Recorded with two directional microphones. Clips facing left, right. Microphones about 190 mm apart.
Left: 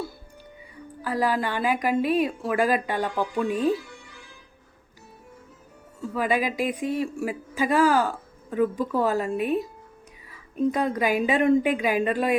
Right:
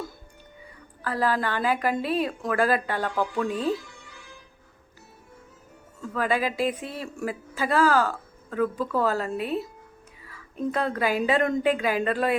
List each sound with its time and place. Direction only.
1.0 s speech: 15° left (ahead or behind)
6.0 s speech: 15° left (ahead or behind)